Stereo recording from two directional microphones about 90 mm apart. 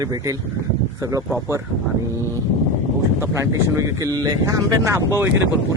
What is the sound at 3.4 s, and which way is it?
Speech, 30° right (ahead or behind).